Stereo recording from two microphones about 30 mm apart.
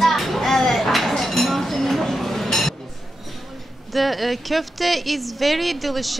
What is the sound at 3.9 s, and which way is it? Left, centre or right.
Speech, centre.